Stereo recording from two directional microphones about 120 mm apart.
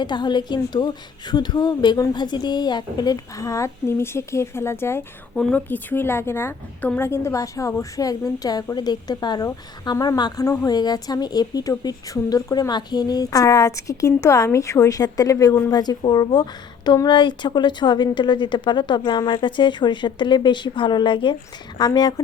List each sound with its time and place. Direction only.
0.0 s a woman's voice: 40° left (ahead or behind); by 5.0 s 20° left (ahead or behind)
5.3 s a woman's voice: 5° left (ahead or behind); by 22.1 s 35° left (ahead or behind)